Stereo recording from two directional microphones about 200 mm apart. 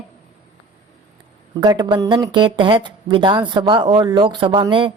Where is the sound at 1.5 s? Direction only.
20° right (ahead or behind).